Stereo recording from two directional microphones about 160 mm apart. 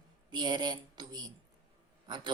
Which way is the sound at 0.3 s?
30° right (ahead or behind).